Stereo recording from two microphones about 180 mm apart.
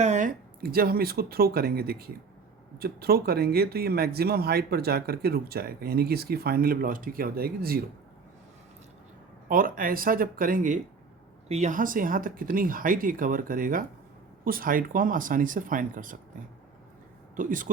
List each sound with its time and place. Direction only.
0.0 s speech: 45° right (ahead or behind)
9.5 s speech: 50° right (ahead or behind)
17.3 s speech: 50° right (ahead or behind)